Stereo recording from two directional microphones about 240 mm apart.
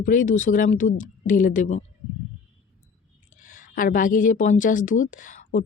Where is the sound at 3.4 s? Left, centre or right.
Left.